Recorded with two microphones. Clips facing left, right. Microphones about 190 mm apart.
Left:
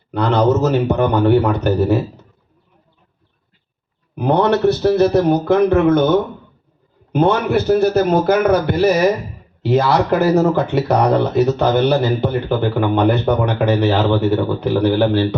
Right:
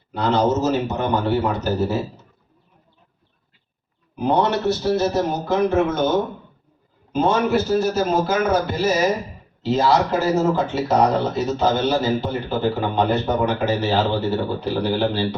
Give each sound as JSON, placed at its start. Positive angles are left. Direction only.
{"t": 0.1, "sound": "speech", "side_deg": 60}
{"t": 4.1, "sound": "speech", "side_deg": 60}
{"t": 7.1, "sound": "speech", "side_deg": 60}